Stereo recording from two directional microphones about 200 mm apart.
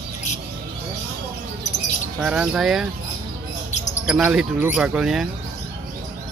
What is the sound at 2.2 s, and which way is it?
Speech, 5° right (ahead or behind).